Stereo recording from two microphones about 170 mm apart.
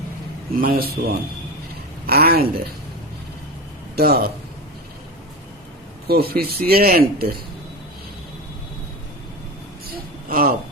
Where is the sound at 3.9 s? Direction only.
65° right (ahead or behind).